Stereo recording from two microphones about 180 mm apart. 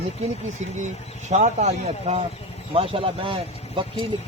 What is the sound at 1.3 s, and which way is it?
Speech, 40° right (ahead or behind).